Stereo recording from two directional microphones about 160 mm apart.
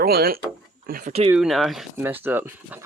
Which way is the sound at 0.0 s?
75° right (ahead or behind).